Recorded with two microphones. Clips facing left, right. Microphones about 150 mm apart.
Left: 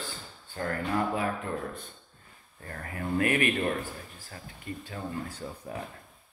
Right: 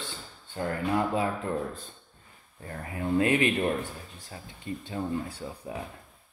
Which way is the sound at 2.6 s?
15° right (ahead or behind).